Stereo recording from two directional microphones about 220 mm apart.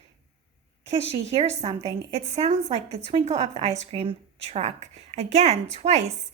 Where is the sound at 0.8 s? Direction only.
30° right (ahead or behind).